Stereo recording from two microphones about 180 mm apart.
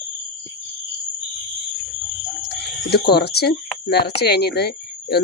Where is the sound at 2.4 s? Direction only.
65° left (ahead or behind).